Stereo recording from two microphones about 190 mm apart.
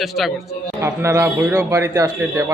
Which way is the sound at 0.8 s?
15° right (ahead or behind).